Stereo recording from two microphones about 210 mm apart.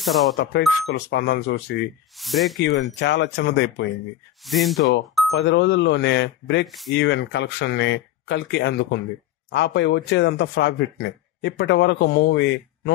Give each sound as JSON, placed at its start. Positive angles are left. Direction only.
{"t": 0.0, "sound": "speech", "side_deg": 0}
{"t": 0.4, "sound": "speech", "side_deg": 55}
{"t": 2.1, "sound": "speech", "side_deg": 0}
{"t": 2.6, "sound": "speech", "side_deg": 55}
{"t": 4.4, "sound": "speech", "side_deg": 0}
{"t": 5.3, "sound": "speech", "side_deg": 55}
{"t": 6.6, "sound": "speech", "side_deg": 0}
{"t": 6.9, "sound": "speech", "side_deg": 55}